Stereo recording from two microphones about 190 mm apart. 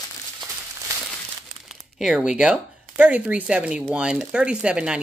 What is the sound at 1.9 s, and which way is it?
Speech, 5° right (ahead or behind).